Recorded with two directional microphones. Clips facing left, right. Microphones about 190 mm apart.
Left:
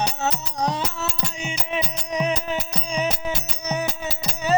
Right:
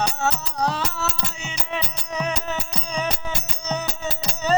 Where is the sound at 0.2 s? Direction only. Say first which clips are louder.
Right 1 dB; 20° left (ahead or behind).